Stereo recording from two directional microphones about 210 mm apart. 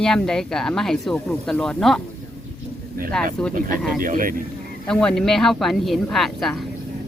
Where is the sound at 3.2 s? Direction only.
5° left (ahead or behind).